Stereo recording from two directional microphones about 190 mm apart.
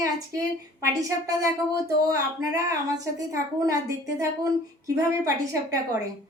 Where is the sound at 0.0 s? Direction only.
15° right (ahead or behind).